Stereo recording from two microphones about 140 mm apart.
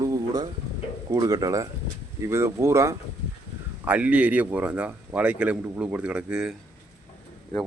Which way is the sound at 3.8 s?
10° right (ahead or behind).